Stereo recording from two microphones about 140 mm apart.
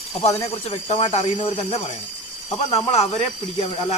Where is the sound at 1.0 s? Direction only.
35° left (ahead or behind).